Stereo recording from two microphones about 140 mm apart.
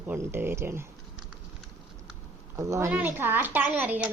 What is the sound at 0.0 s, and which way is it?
Speech, 15° right (ahead or behind).